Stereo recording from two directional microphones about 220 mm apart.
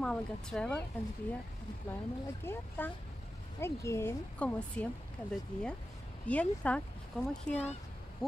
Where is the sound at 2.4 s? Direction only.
10° left (ahead or behind).